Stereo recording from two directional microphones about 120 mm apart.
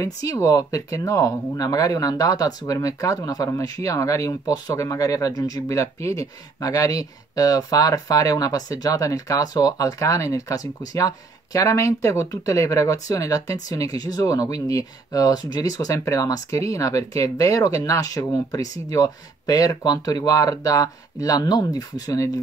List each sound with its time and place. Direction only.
0.0 s speech: 30° left (ahead or behind)